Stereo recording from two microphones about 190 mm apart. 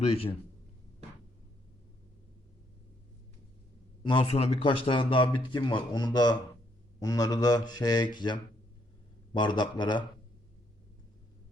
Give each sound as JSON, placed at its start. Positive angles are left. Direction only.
{"t": 0.0, "sound": "a man's voice", "side_deg": 30}
{"t": 4.0, "sound": "speech", "side_deg": 25}